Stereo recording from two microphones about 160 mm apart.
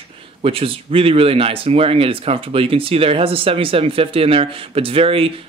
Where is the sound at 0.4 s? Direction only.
35° right (ahead or behind).